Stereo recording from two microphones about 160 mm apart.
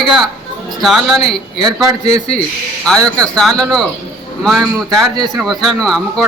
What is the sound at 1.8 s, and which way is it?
Speech, 25° right (ahead or behind).